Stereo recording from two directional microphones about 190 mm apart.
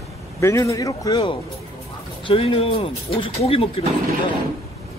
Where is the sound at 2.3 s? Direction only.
30° left (ahead or behind).